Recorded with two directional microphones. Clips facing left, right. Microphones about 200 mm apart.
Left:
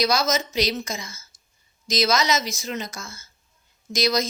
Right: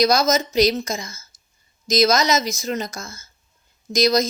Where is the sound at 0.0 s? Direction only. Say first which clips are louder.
Right 5 dB; 40° right (ahead or behind).